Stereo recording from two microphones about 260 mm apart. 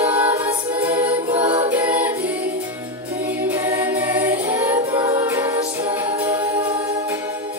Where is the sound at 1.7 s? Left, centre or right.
Centre.